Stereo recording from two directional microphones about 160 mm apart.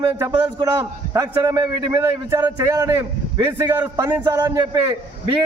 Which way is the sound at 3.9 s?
25° right (ahead or behind).